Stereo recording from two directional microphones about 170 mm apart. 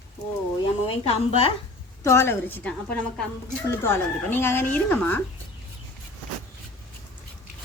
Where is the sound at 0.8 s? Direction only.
35° left (ahead or behind).